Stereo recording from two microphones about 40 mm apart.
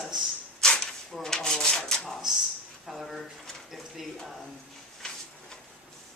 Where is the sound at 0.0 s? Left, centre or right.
Centre.